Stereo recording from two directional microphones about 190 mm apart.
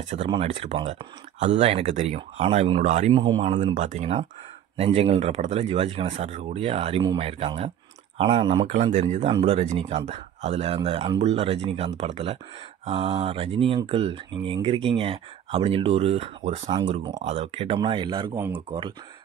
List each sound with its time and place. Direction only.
0.3 s speech: 30° right (ahead or behind)
3.1 s speech: 25° right (ahead or behind)
3.3 s speech: 35° right (ahead or behind)
18.4 s speech: 10° right (ahead or behind)